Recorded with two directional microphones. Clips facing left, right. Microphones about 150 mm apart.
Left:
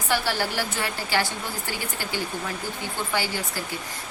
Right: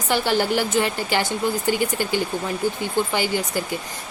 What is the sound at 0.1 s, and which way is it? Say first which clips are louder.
A woman's voice: right 6 dB; 20° right (ahead or behind).